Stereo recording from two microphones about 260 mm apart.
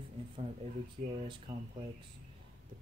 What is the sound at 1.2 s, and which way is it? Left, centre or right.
Speech, right.